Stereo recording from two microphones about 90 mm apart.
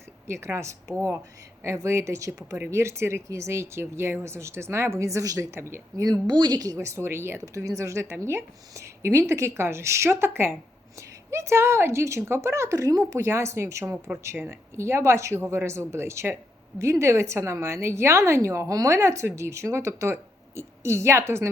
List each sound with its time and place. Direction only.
0.3 s speech: 30° right (ahead or behind)
6.0 s a woman's voice: 50° right (ahead or behind)
6.7 s speech: 30° right (ahead or behind)